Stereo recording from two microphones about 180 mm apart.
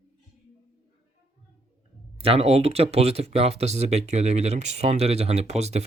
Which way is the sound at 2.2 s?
35° right (ahead or behind).